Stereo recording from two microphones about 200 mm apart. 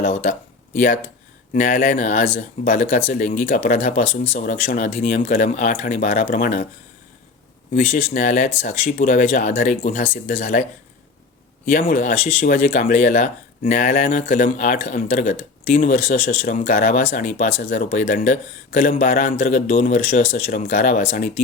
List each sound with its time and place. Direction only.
0.0 s speech: 35° left (ahead or behind)
7.8 s speech: 35° left (ahead or behind)
16.1 s speech: 50° left (ahead or behind)